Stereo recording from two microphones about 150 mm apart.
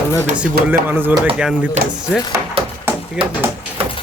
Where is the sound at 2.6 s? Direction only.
40° right (ahead or behind).